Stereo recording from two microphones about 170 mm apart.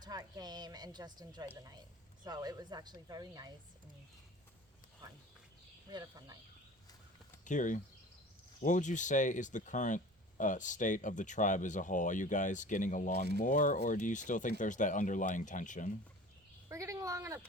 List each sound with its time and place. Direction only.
0.0 s a woman's voice: 20° right (ahead or behind)
5.0 s a sound: 20° right (ahead or behind)
5.9 s a woman's voice: 20° right (ahead or behind)
7.4 s speech: 50° left (ahead or behind)
16.6 s speech: 20° right (ahead or behind)